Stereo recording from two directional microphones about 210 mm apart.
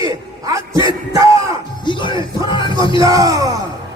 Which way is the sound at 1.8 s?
20° left (ahead or behind).